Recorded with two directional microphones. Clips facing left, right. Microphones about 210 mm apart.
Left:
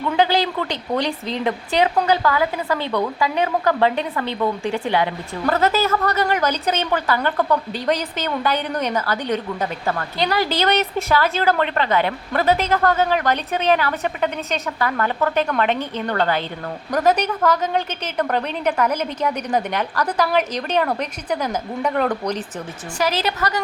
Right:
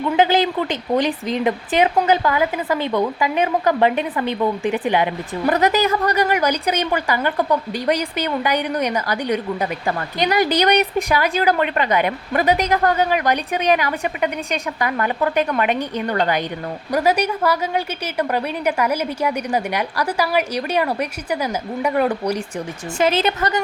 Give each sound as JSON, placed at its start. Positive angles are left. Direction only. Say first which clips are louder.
{"t": 0.2, "sound": "a woman's voice", "louder": "right 2 dB", "side_deg": -20}
{"t": 23.0, "sound": "a woman's voice", "louder": "right 3 dB", "side_deg": -25}